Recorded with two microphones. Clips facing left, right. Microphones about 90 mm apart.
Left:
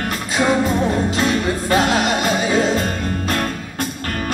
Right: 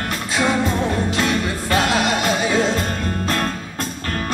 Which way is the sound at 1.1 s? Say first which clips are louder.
Left 2 dB; 30° left (ahead or behind).